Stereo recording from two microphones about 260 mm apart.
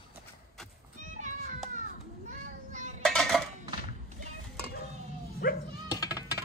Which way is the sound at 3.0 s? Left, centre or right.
Centre.